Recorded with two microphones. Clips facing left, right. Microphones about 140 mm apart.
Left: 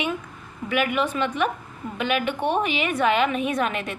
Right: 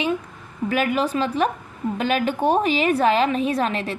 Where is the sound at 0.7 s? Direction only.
35° right (ahead or behind).